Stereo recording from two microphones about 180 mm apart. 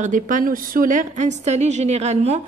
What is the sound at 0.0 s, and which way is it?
A woman's voice, 45° right (ahead or behind).